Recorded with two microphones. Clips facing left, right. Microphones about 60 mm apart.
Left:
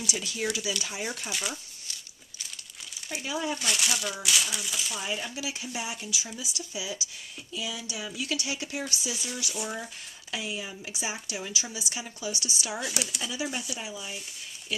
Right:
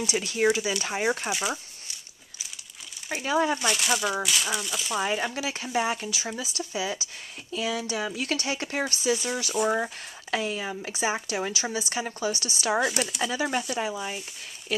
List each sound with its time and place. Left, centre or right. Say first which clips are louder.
0.0 s speech: right 8 dB; right
3.1 s speech: right 7 dB; right
3.7 s speech: right 5 dB; centre
4.9 s speech: right 10 dB; right
5.3 s speech: right 7 dB; right
12.9 s speech: right 5 dB; centre
13.2 s speech: right 6 dB; right